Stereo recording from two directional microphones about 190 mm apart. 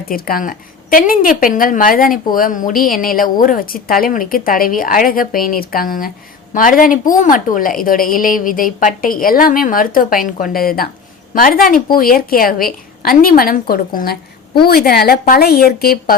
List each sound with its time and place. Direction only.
0.1 s a woman's voice: 50° left (ahead or behind)